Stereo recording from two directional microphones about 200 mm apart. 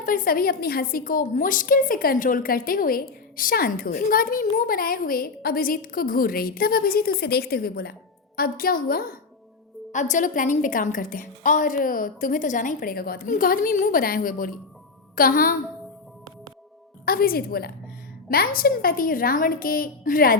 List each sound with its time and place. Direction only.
0.0 s a woman's voice: 45° left (ahead or behind)
17.1 s a woman's voice: 45° left (ahead or behind)